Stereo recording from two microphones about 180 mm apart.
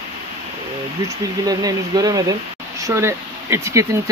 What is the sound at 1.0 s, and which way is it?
Speech, 20° right (ahead or behind).